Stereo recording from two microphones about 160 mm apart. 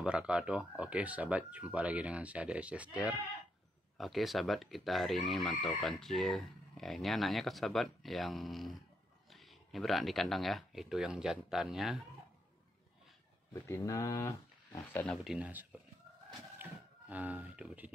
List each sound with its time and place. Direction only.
0.0 s speech: 5° right (ahead or behind)
13.5 s speech: 20° left (ahead or behind)
15.2 s speech: 10° right (ahead or behind)
16.6 s a sound: 10° right (ahead or behind)
17.1 s speech: 10° right (ahead or behind)